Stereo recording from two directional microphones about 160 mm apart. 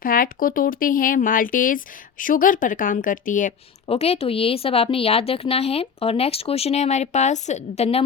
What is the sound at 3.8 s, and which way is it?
Speech, 40° left (ahead or behind).